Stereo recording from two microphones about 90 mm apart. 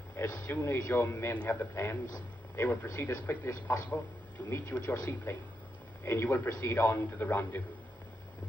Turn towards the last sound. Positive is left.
turn(degrees=20)  # may be behind; listen again after turning